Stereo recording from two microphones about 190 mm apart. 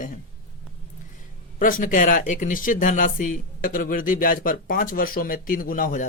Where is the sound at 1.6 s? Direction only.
45° left (ahead or behind).